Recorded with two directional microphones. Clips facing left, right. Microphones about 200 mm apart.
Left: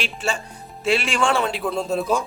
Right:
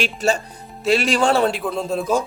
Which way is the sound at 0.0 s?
40° right (ahead or behind).